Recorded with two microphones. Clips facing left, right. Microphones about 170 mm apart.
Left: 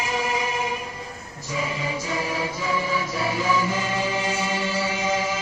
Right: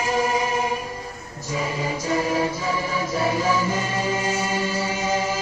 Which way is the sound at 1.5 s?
40° right (ahead or behind).